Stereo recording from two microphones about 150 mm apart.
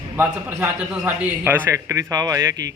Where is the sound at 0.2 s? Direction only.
10° right (ahead or behind).